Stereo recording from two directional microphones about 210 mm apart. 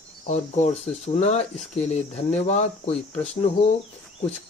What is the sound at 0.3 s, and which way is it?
Speech, 35° left (ahead or behind).